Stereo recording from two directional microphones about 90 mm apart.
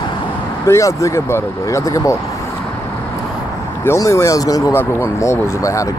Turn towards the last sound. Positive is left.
turn(degrees=35)  # may be behind; listen again after turning